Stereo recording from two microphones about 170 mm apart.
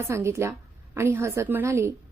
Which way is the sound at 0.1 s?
15° right (ahead or behind).